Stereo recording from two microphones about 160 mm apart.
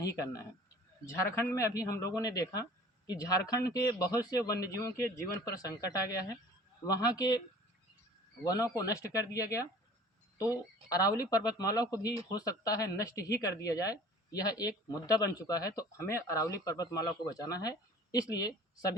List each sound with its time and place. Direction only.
0.0 s speech: 20° left (ahead or behind)
8.4 s speech: 20° left (ahead or behind)